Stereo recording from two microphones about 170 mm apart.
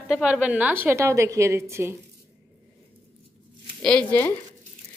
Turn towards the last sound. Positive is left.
turn(degrees=10)  # may be behind; listen again after turning